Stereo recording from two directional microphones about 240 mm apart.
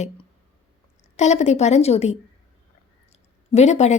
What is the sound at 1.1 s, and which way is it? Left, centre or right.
A woman's voice, left.